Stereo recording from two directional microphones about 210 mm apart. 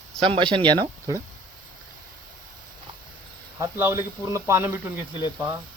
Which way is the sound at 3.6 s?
15° right (ahead or behind).